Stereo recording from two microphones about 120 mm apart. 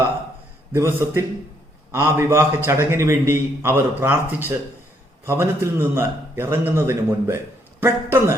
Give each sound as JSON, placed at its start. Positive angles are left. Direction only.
{"t": 0.7, "sound": "a man's voice", "side_deg": -20}